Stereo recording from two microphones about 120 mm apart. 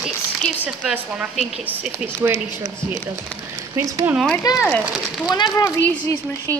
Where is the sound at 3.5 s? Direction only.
25° right (ahead or behind).